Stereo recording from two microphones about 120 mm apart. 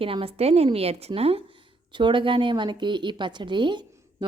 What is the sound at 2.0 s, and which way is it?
A woman's voice, 40° right (ahead or behind).